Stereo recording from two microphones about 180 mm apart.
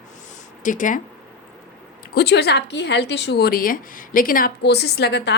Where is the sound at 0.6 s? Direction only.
45° left (ahead or behind).